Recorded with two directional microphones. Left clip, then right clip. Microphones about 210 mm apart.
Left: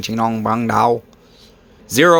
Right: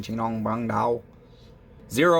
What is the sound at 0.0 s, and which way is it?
Speech, 35° left (ahead or behind).